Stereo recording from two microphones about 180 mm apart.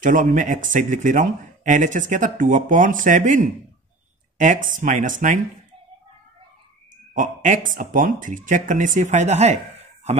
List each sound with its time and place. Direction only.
0.0 s speech: 45° right (ahead or behind)
7.2 s speech: 45° right (ahead or behind)